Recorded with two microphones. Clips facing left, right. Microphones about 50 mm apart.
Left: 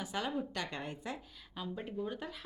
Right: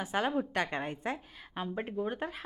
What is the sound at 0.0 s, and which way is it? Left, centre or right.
A woman's voice, right.